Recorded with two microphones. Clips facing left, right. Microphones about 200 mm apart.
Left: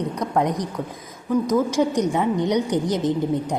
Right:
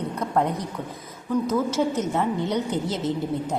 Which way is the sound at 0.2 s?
15° left (ahead or behind).